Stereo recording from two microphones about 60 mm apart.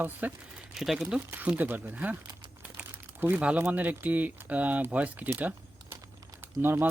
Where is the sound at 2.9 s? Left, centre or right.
Right.